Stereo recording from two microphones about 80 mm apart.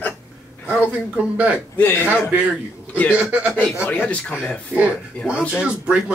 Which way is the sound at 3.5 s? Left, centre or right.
Centre.